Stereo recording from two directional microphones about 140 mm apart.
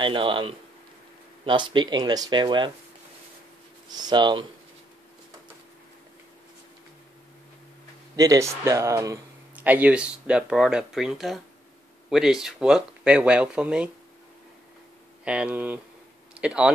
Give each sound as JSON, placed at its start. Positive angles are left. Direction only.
{"t": 0.0, "sound": "speech", "side_deg": -35}
{"t": 3.9, "sound": "speech", "side_deg": -30}
{"t": 8.2, "sound": "speech", "side_deg": -25}
{"t": 9.6, "sound": "speech", "side_deg": -10}
{"t": 15.2, "sound": "speech", "side_deg": -5}